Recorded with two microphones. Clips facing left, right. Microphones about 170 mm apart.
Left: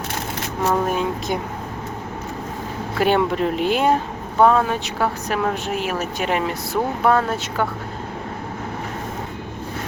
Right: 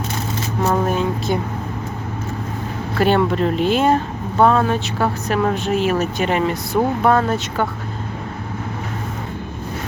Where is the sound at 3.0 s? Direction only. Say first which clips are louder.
Right 2 dB; 10° left (ahead or behind).